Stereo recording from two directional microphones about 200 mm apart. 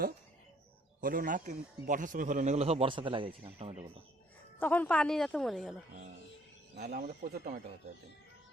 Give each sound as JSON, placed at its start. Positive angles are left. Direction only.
{"t": 1.0, "sound": "a man's voice", "side_deg": -45}
{"t": 4.6, "sound": "a woman's voice", "side_deg": 10}
{"t": 6.7, "sound": "speech", "side_deg": -50}